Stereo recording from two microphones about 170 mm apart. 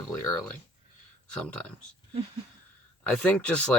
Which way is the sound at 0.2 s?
15° left (ahead or behind).